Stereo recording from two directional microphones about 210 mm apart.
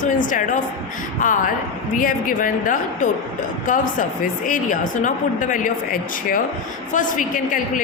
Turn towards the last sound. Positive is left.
turn(degrees=40)  # may be behind; listen again after turning